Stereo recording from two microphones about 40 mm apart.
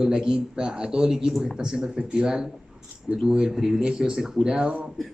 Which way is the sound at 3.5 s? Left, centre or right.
Centre.